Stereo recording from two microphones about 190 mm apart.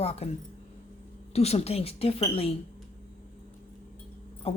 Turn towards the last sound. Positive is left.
turn(degrees=30)  # may be behind; listen again after turning